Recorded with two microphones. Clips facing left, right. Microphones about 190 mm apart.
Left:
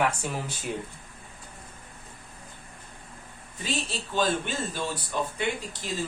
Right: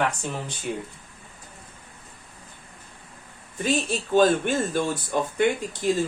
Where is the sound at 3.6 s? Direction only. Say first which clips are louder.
Right 7 dB; 50° right (ahead or behind).